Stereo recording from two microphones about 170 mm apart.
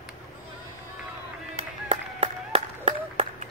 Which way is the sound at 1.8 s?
40° right (ahead or behind).